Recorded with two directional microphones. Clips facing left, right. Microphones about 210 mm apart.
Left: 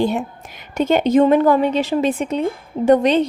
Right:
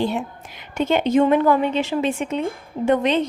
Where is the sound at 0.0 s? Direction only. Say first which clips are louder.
Left 4 dB; 45° left (ahead or behind).